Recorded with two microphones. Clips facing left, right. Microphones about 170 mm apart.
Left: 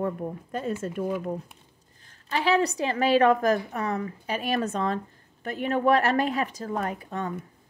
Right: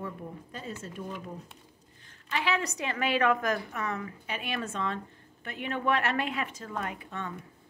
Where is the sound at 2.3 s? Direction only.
35° left (ahead or behind).